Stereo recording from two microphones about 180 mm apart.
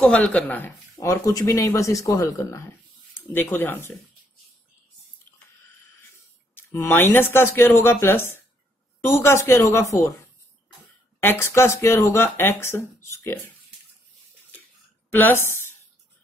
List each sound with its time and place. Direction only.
0.0 s speech: 5° left (ahead or behind)
6.5 s speech: 15° left (ahead or behind)
11.1 s speech: 15° left (ahead or behind)
15.0 s a woman's voice: 10° left (ahead or behind)